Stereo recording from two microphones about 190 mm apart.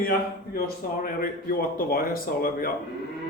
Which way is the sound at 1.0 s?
50° left (ahead or behind).